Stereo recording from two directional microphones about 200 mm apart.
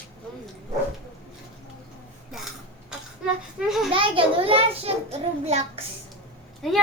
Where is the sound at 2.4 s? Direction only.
Centre (ahead or behind).